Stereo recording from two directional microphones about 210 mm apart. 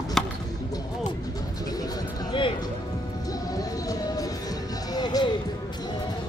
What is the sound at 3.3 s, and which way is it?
Music, 15° left (ahead or behind).